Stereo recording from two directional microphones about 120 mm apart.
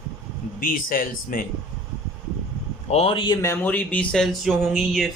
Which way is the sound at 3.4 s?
20° left (ahead or behind).